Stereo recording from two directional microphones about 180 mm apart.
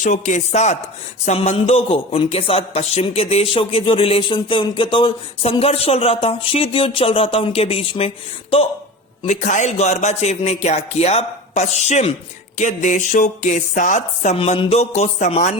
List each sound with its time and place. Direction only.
0.0 s speech: 40° left (ahead or behind)
9.2 s speech: 45° left (ahead or behind)